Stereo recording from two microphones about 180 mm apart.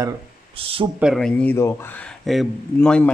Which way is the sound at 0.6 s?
30° right (ahead or behind).